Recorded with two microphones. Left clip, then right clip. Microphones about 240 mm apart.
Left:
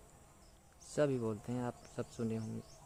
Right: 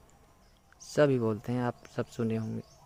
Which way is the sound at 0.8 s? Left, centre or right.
Right.